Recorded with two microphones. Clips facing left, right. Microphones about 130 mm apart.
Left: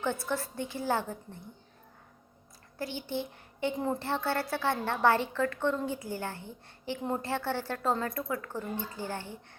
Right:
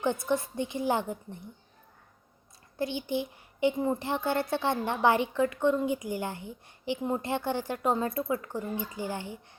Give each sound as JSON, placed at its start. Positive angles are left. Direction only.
{"t": 0.0, "sound": "a woman's voice", "side_deg": -20}
{"t": 2.7, "sound": "a child's voice", "side_deg": -20}